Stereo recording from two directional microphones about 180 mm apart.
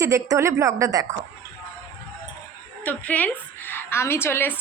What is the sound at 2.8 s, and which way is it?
A woman's voice, 10° left (ahead or behind).